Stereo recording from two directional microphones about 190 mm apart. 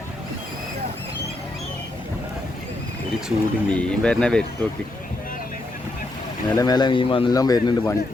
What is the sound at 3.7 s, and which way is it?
Speech, 5° left (ahead or behind).